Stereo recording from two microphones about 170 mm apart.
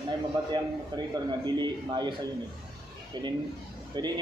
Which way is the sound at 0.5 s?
25° right (ahead or behind).